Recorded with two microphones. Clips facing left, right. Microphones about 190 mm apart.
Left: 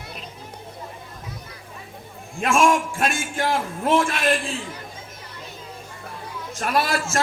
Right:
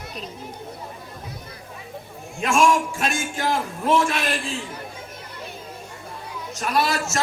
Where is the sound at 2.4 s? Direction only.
50° left (ahead or behind).